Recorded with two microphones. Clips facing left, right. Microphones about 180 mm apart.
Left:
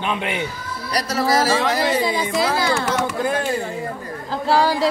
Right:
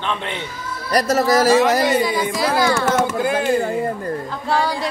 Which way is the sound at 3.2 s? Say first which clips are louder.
Right 2 dB; 5° right (ahead or behind).